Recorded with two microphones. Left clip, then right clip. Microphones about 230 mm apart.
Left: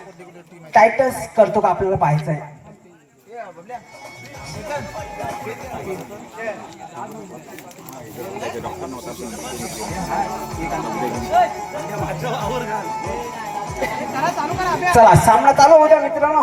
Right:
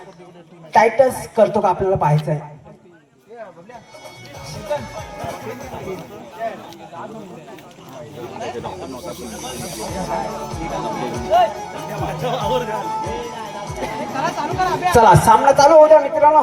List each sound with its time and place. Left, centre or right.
0.7 s speech: right
9.6 s speech: right
12.2 s speech: right
12.7 s speech: right
14.2 s speech: right
14.9 s speech: right